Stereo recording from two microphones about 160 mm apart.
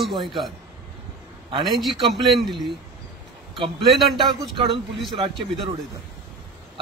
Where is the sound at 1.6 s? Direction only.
Centre (ahead or behind).